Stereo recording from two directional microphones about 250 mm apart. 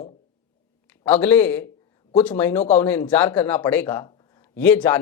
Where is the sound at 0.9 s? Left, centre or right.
Centre.